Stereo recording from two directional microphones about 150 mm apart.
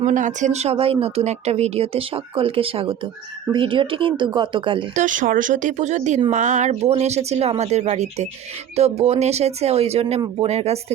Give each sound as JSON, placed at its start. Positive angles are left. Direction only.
{"t": 0.0, "sound": "speech", "side_deg": -55}
{"t": 4.9, "sound": "speech", "side_deg": -60}